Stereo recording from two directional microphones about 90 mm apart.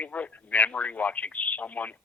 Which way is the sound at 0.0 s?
15° left (ahead or behind).